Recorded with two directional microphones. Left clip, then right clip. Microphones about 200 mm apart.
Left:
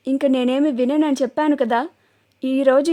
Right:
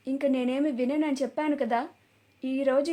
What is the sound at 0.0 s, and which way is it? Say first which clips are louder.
A woman's voice: left 9 dB; 50° left (ahead or behind).